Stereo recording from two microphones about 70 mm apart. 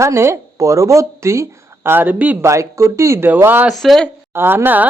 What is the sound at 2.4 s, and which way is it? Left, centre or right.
Speech, right.